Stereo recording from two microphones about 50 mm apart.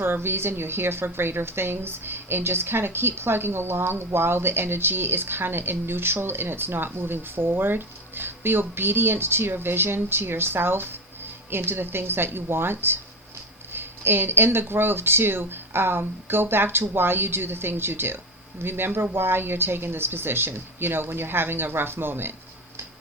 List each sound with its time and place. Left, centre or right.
0.0 s a woman's voice: right